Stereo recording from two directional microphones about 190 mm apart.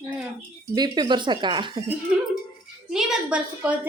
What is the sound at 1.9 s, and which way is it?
A woman's voice, 5° right (ahead or behind).